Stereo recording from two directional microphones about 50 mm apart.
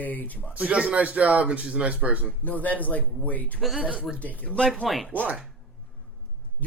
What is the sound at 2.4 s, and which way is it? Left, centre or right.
Speech, left.